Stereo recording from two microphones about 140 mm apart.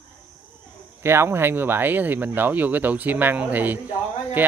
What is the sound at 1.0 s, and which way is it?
Speech, 15° right (ahead or behind).